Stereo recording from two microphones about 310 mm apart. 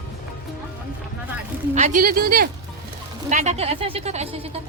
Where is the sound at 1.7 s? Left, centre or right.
Right.